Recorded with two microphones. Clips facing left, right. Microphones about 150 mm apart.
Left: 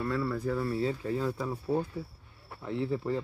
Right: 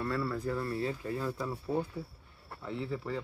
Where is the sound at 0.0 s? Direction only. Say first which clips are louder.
Left 2 dB; 5° left (ahead or behind).